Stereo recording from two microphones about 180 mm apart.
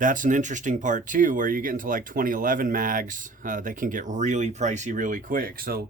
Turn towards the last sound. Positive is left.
turn(degrees=-55)  # may be behind; listen again after turning